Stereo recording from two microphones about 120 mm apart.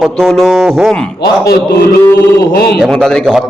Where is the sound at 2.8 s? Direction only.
Centre (ahead or behind).